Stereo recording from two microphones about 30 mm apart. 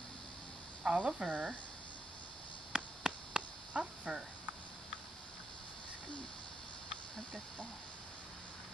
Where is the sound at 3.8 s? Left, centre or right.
Right.